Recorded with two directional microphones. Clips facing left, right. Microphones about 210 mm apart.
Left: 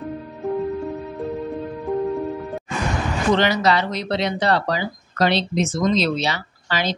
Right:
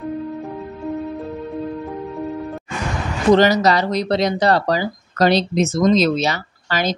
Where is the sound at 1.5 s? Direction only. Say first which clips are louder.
Even; centre (ahead or behind).